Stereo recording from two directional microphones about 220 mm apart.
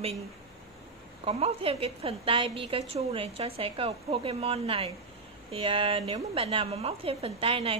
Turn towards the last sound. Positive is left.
turn(degrees=-25)  # may be behind; listen again after turning